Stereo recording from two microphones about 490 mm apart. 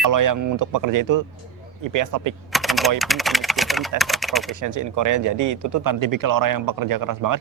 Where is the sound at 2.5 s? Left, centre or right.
Centre.